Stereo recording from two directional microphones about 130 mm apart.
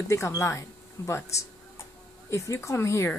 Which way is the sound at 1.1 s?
20° left (ahead or behind).